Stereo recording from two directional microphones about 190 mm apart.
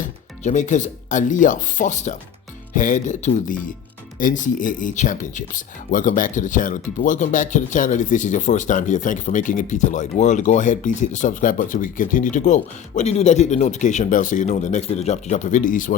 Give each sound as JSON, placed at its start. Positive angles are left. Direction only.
{"t": 0.4, "sound": "speech", "side_deg": 40}